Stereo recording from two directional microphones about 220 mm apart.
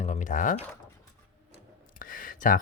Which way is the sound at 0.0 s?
35° left (ahead or behind).